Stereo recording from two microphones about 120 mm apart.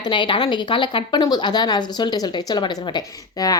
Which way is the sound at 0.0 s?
40° left (ahead or behind).